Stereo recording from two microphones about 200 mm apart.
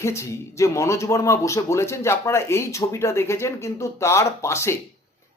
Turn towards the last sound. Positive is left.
turn(degrees=15)  # may be behind; listen again after turning